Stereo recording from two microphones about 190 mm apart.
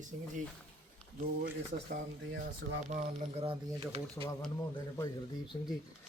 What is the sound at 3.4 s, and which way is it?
Speech, 30° right (ahead or behind).